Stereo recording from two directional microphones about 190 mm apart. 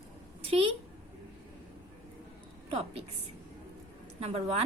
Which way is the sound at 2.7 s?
30° right (ahead or behind).